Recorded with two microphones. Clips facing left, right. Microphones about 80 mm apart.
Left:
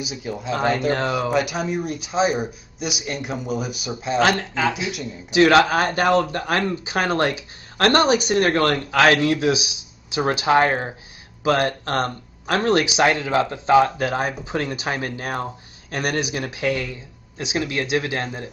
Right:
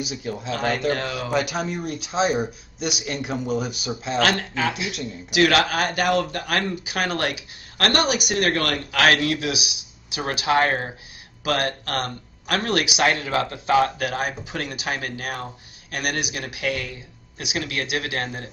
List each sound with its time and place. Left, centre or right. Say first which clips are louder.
0.0 s speech: left 1 dB; centre
0.6 s speech: left 4 dB; left
1.3 s speech: left 2 dB; centre
4.4 s speech: left 2 dB; left